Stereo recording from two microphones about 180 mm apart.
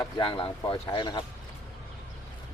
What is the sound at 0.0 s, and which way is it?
Speech, 30° left (ahead or behind).